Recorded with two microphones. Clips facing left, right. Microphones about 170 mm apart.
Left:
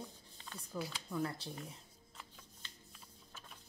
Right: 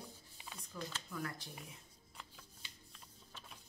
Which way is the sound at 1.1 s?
25° left (ahead or behind).